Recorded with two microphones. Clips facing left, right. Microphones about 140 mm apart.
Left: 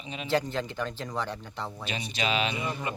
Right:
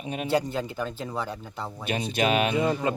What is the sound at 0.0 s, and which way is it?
Speech, 50° right (ahead or behind).